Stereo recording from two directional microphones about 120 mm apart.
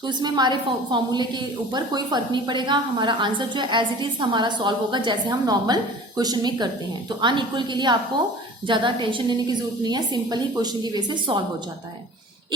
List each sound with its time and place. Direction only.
0.0 s a woman's voice: 35° right (ahead or behind)